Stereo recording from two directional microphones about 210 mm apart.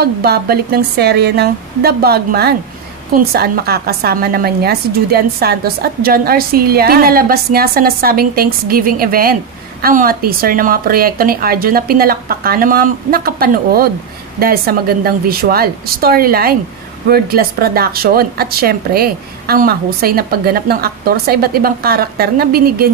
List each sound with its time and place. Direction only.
0.0 s a woman's voice: 50° right (ahead or behind)